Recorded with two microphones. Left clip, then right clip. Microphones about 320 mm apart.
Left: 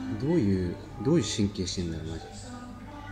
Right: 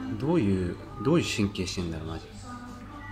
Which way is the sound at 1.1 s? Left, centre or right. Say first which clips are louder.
Right 1 dB; centre.